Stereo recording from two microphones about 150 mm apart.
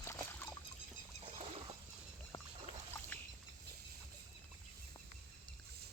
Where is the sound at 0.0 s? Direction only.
15° left (ahead or behind).